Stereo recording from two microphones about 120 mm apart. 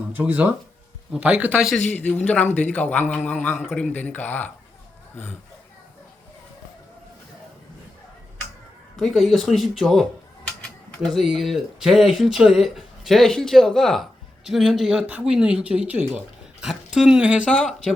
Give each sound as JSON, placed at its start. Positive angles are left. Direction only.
{"t": 0.1, "sound": "speech", "side_deg": -15}
{"t": 1.8, "sound": "a man's voice", "side_deg": 15}
{"t": 3.5, "sound": "speech", "side_deg": -5}
{"t": 3.9, "sound": "a man's voice", "side_deg": 15}
{"t": 9.0, "sound": "speech", "side_deg": 0}
{"t": 17.5, "sound": "speech", "side_deg": 5}